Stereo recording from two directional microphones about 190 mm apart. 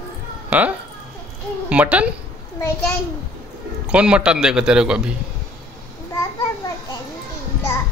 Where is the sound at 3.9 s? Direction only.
5° right (ahead or behind).